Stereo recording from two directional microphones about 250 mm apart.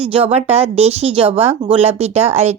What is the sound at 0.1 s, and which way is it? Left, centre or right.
A woman's voice, right.